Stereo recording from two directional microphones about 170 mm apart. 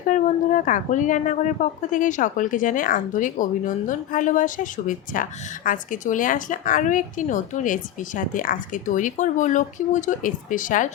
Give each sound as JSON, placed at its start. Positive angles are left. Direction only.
{"t": 0.0, "sound": "speech", "side_deg": 50}